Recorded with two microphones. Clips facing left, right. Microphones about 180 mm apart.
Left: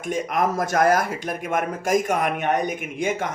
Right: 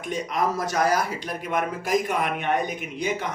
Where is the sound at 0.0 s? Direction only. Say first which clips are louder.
Left 3 dB; 50° left (ahead or behind).